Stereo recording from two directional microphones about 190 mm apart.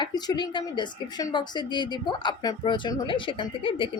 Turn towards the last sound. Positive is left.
turn(degrees=25)  # may be behind; listen again after turning